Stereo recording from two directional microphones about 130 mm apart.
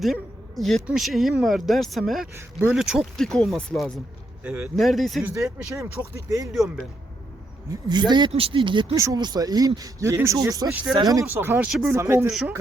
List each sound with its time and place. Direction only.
0.0 s a sound: centre (ahead or behind)
0.9 s speech: centre (ahead or behind)
5.2 s speech: 20° right (ahead or behind)
6.5 s speech: centre (ahead or behind)
7.7 s speech: 35° right (ahead or behind)
8.3 s speech: 45° right (ahead or behind); by 11.3 s 30° right (ahead or behind)
11.3 s speech: 15° right (ahead or behind)